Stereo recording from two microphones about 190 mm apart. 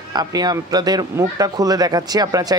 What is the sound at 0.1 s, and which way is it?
A man's voice, 20° right (ahead or behind).